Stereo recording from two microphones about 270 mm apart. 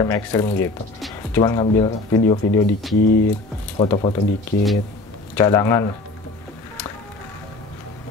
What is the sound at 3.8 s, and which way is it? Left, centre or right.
Speech, centre.